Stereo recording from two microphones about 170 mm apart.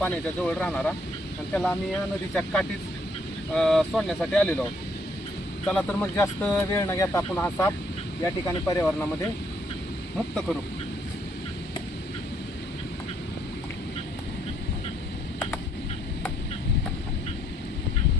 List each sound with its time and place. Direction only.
0.0 s speech: 10° left (ahead or behind)
5.6 s speech: 5° left (ahead or behind)